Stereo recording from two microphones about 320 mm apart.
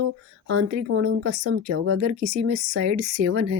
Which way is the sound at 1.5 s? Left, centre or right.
Right.